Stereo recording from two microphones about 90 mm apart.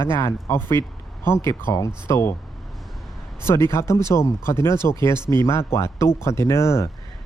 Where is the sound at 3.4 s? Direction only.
30° left (ahead or behind).